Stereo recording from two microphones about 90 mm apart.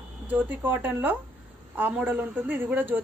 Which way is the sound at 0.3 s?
20° right (ahead or behind).